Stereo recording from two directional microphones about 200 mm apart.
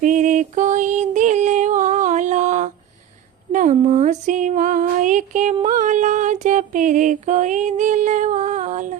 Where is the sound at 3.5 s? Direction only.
40° right (ahead or behind).